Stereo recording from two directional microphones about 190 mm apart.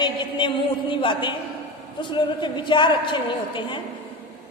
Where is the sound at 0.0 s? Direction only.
25° left (ahead or behind).